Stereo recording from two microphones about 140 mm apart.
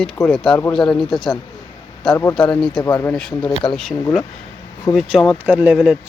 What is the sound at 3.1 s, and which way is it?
Speech, 5° left (ahead or behind).